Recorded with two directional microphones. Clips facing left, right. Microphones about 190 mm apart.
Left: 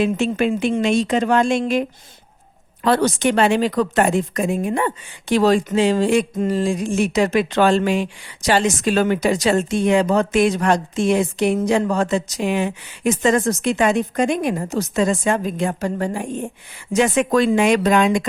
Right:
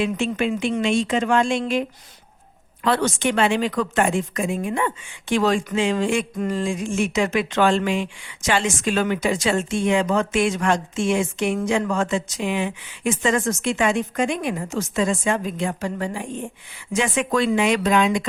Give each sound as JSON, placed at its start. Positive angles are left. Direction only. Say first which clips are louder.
{"t": 0.0, "sound": "speech", "louder": "left 4 dB", "side_deg": 40}
{"t": 2.8, "sound": "speech", "louder": "left 4 dB", "side_deg": 40}